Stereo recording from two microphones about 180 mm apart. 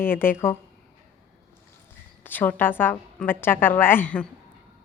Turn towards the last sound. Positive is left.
turn(degrees=10)  # may be behind; listen again after turning